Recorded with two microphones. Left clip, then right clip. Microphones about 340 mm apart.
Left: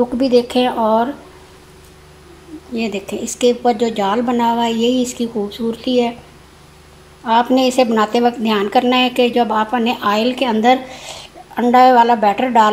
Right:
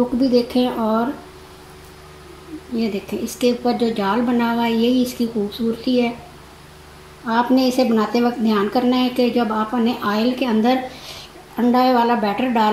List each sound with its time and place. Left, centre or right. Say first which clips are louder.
0.2 s a woman's voice: left 5 dB; left
2.7 s a woman's voice: left 2 dB; left
7.2 s a woman's voice: left 4 dB; left